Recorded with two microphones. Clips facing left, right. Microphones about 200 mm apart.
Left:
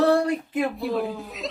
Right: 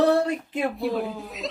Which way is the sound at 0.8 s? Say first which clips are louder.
Even; centre (ahead or behind).